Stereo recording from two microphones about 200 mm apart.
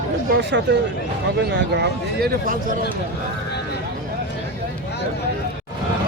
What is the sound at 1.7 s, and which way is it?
Speech, 55° right (ahead or behind).